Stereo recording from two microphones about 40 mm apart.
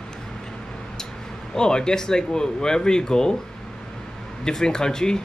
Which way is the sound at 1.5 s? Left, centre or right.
Centre.